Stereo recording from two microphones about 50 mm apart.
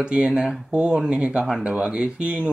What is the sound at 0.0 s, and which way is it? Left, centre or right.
Speech, centre.